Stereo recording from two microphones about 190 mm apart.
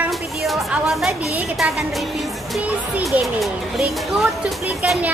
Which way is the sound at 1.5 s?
Centre (ahead or behind).